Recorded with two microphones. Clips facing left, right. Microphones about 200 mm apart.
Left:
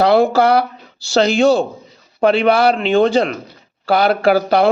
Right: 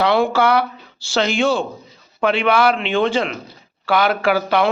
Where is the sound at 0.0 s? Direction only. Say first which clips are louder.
Left 4 dB; 40° left (ahead or behind).